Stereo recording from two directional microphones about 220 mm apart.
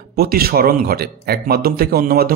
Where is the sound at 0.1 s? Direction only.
45° right (ahead or behind).